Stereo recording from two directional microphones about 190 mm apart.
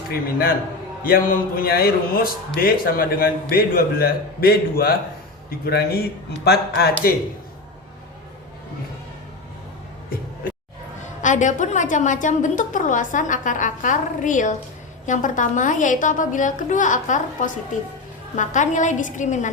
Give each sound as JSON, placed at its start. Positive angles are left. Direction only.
{"t": 0.1, "sound": "a woman's voice", "side_deg": 55}
{"t": 11.0, "sound": "a woman's voice", "side_deg": 40}